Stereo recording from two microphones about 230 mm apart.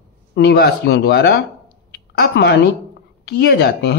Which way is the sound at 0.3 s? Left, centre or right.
Left.